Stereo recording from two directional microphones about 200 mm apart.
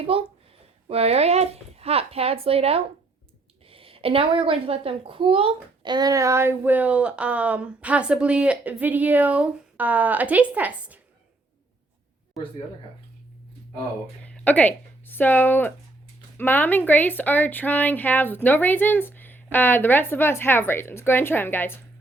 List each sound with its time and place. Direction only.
0.0 s a child's voice: 30° right (ahead or behind); by 11.0 s 10° right (ahead or behind)
12.3 s speech: 25° left (ahead or behind)
14.3 s a woman's voice: 5° left (ahead or behind)